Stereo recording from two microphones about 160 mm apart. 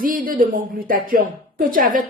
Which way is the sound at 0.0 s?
60° right (ahead or behind).